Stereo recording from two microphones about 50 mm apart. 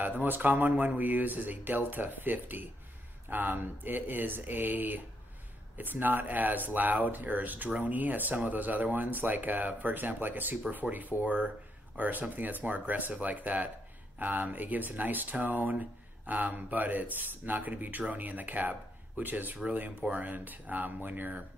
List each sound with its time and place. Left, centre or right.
0.2 s speech: right